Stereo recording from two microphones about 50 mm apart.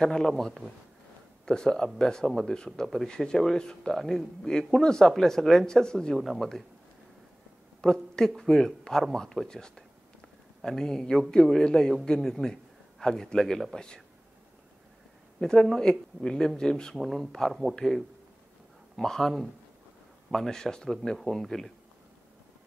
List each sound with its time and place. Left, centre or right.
0.0 s speech: centre
1.4 s speech: centre
6.1 s speech: centre
7.8 s a woman's voice: centre
15.4 s speech: centre
16.9 s speech: centre